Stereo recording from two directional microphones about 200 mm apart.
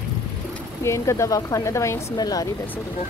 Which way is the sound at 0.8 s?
15° left (ahead or behind).